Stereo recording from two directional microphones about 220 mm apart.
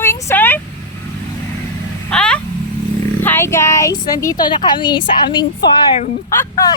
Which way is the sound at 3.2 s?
10° left (ahead or behind).